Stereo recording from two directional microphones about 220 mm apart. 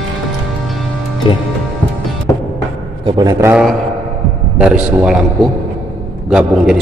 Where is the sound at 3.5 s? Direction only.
Centre (ahead or behind).